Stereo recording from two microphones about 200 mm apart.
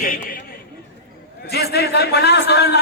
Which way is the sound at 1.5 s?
55° left (ahead or behind).